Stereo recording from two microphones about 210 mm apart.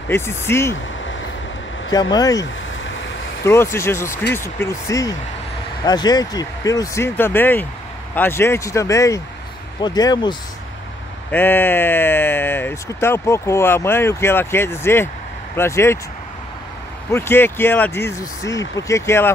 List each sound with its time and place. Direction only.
0.1 s speech: 10° left (ahead or behind)
1.9 s speech: 20° left (ahead or behind)
2.8 s boat: 65° left (ahead or behind)
3.4 s speech: 15° left (ahead or behind)
11.3 s speech: 10° left (ahead or behind)
17.1 s speech: 10° left (ahead or behind)